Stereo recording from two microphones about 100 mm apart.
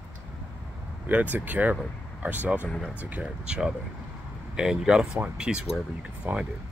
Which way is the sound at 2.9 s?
15° right (ahead or behind).